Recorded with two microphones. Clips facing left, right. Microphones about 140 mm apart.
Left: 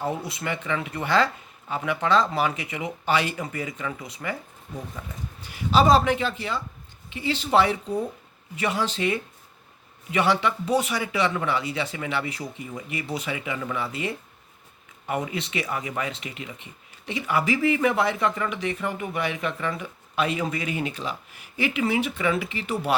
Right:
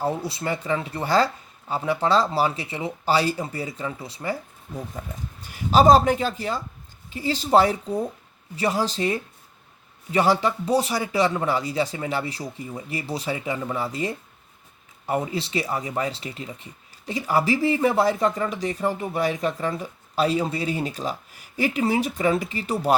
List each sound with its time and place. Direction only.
0.0 s speech: 35° right (ahead or behind)
5.0 s speech: 40° right (ahead or behind)